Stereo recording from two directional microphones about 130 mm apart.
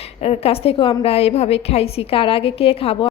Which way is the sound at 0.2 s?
55° left (ahead or behind).